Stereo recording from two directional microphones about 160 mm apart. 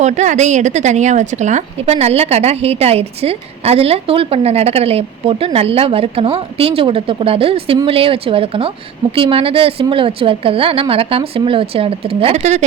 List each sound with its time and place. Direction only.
0.0 s a woman's voice: 50° right (ahead or behind)